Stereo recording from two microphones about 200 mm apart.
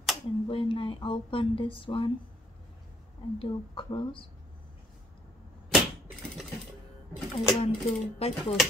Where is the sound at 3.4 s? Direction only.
25° left (ahead or behind).